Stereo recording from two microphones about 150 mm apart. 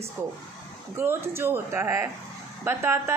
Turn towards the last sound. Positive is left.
turn(degrees=-15)  # may be behind; listen again after turning